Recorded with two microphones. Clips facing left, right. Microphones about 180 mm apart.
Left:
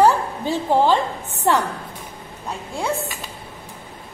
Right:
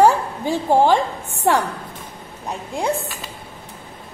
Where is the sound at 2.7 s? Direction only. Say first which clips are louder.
Right 2 dB; 15° right (ahead or behind).